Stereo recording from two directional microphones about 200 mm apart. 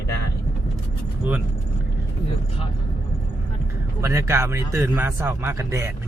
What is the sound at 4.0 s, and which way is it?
A man's voice, 15° right (ahead or behind).